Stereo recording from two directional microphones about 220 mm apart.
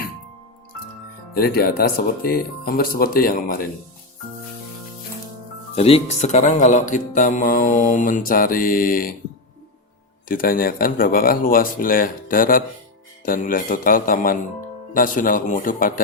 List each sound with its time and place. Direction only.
1.3 s speech: 45° left (ahead or behind)
5.7 s speech: 25° left (ahead or behind)
10.2 s speech: 40° left (ahead or behind)